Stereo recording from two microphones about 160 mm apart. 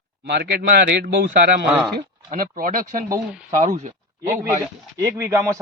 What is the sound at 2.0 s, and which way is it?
Speech, 60° right (ahead or behind).